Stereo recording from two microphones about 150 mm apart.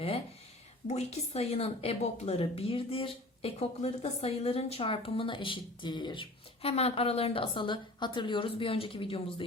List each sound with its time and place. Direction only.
0.9 s speech: 45° left (ahead or behind)